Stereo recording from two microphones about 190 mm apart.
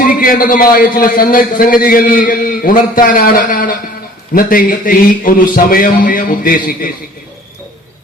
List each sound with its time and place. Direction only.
0.0 s a man's voice: 50° left (ahead or behind)